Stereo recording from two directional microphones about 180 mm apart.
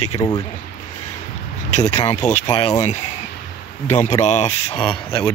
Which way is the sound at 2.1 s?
40° left (ahead or behind).